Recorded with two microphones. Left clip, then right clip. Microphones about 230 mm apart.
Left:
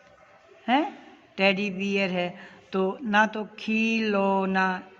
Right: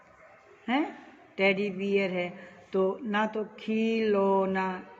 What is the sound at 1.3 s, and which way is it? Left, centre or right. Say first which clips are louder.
Mantra: left 2 dB; left.